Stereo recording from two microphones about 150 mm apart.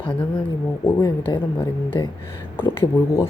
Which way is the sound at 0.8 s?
20° left (ahead or behind).